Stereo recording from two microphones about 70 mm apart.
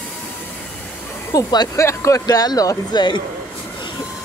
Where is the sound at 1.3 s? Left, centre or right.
Left.